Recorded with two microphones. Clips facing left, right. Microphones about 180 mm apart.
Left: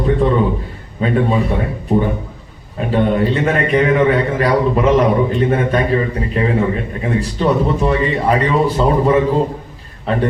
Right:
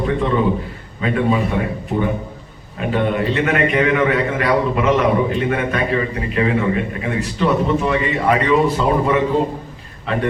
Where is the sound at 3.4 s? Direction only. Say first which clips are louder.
Left 2 dB; 30° left (ahead or behind).